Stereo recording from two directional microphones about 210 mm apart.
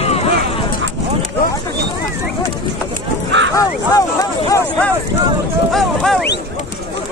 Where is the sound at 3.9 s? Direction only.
15° left (ahead or behind).